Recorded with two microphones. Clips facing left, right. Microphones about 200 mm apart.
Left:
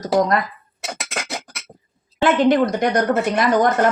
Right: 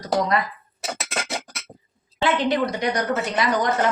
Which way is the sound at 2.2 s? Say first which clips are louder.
Left 6 dB; 50° left (ahead or behind).